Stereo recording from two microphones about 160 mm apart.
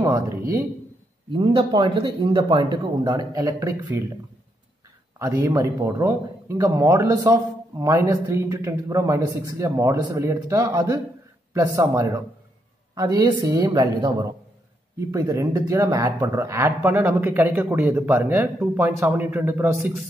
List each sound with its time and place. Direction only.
0.0 s a man's voice: 20° right (ahead or behind)
1.3 s a man's voice: 30° right (ahead or behind)
5.2 s a man's voice: 20° right (ahead or behind)